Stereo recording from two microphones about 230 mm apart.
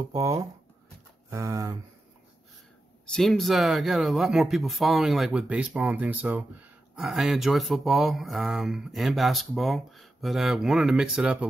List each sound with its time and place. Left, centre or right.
0.0 s speech: centre
3.1 s speech: centre